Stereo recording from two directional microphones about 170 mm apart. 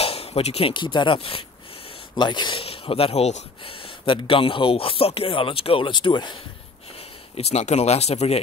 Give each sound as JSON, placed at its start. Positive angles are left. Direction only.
{"t": 0.0, "sound": "speech", "side_deg": 35}
{"t": 7.3, "sound": "speech", "side_deg": 40}